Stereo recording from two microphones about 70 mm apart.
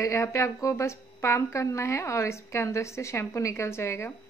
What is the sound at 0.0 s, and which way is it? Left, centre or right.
A woman's voice, left.